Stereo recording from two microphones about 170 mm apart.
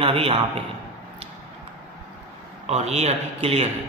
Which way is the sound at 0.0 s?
35° right (ahead or behind).